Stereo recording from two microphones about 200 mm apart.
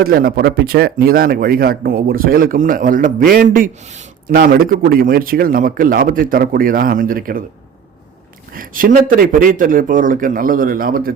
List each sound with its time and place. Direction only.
0.0 s speech: 45° right (ahead or behind)
8.5 s speech: 45° right (ahead or behind)